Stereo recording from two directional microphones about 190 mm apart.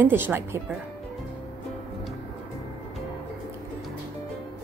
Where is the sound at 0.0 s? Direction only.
10° right (ahead or behind).